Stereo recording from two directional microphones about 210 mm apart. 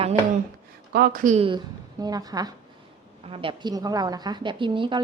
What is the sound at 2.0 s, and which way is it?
A woman's voice, 20° right (ahead or behind).